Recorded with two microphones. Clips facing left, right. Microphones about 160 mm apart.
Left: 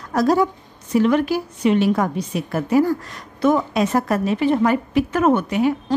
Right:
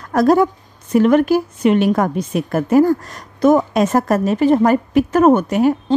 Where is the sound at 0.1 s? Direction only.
55° right (ahead or behind).